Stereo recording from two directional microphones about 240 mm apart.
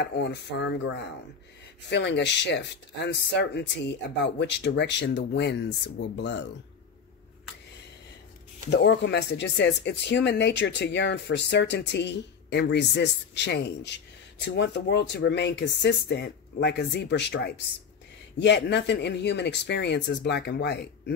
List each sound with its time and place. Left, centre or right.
0.0 s speech: left
8.6 s speech: left